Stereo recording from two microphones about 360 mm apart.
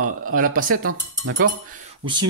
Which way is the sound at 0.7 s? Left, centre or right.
Right.